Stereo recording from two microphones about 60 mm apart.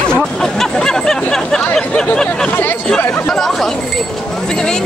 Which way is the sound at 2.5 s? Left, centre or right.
Left.